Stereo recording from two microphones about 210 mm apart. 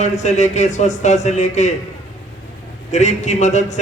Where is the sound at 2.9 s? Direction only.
35° left (ahead or behind).